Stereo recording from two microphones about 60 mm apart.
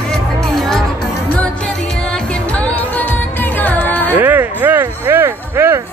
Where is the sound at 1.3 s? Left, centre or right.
Left.